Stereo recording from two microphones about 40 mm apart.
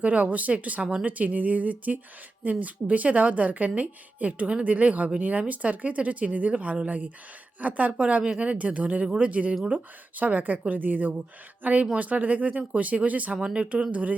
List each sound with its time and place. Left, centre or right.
0.0 s speech: right
13.3 s speech: right